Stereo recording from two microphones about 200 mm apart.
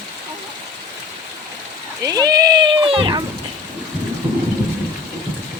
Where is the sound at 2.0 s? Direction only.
20° right (ahead or behind).